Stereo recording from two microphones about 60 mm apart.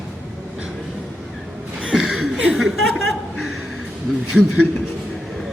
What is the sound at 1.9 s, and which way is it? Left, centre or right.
Chuckle, centre.